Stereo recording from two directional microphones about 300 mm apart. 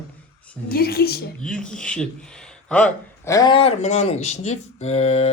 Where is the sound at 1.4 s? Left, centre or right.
Centre.